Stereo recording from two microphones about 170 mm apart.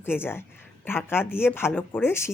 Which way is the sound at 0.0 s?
15° left (ahead or behind).